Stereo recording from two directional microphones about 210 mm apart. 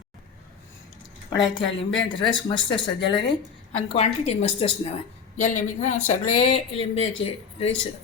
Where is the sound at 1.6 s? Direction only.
60° left (ahead or behind).